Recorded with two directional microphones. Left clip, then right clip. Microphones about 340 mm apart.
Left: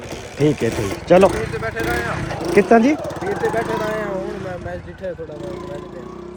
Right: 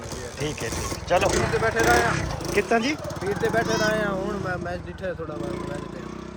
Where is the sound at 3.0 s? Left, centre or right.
Left.